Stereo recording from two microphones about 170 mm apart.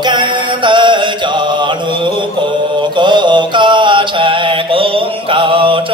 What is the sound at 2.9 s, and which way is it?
Mantra, 25° right (ahead or behind).